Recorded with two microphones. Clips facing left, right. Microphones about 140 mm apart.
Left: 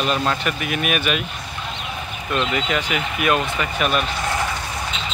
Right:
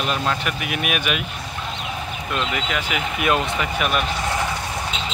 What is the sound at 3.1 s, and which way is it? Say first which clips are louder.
Speech: left 1 dB; 20° right (ahead or behind).